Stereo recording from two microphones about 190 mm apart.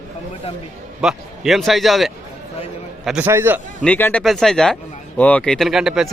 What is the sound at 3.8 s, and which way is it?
A man's voice, 10° left (ahead or behind).